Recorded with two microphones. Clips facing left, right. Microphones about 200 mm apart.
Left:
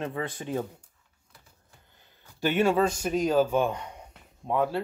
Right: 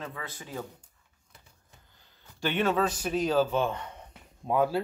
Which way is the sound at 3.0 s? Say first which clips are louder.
Left 2 dB; 10° left (ahead or behind).